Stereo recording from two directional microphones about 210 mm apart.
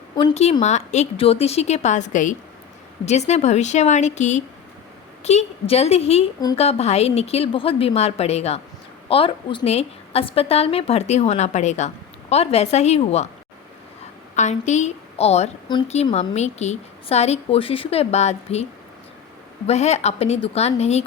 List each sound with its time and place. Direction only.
0.2 s a woman's voice: 25° left (ahead or behind)
14.3 s a woman's voice: 35° left (ahead or behind)
19.6 s a woman's voice: 30° left (ahead or behind)